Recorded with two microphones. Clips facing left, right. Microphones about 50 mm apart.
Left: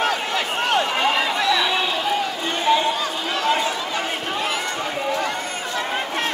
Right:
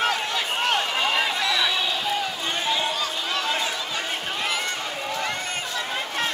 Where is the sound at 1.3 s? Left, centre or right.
Left.